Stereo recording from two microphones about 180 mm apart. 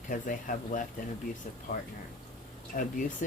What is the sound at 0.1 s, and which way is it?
Speech, 50° left (ahead or behind).